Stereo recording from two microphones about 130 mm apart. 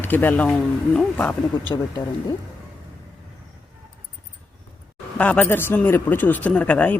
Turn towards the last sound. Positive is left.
turn(degrees=10)  # may be behind; listen again after turning